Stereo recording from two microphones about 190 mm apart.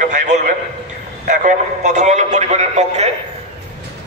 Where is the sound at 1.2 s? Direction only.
40° right (ahead or behind).